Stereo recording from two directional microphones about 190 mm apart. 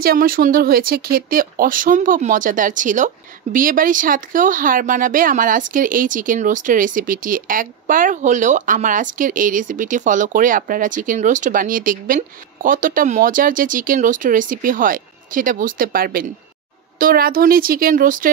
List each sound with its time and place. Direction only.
0.0 s speech: 50° right (ahead or behind)